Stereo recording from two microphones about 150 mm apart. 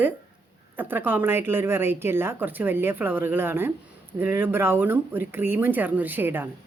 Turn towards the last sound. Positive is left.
turn(degrees=-15)  # may be behind; listen again after turning